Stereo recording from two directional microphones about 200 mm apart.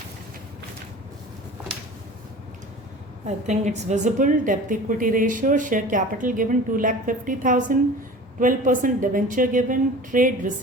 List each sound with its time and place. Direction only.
3.2 s a woman's voice: 35° right (ahead or behind)